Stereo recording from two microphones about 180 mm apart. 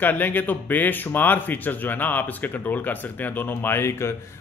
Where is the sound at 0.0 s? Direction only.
10° left (ahead or behind).